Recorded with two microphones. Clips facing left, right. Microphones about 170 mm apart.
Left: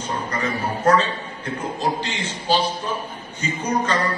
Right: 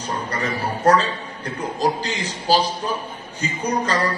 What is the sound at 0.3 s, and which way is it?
A man's voice, 35° right (ahead or behind).